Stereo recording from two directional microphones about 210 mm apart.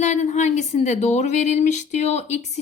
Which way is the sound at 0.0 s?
35° left (ahead or behind).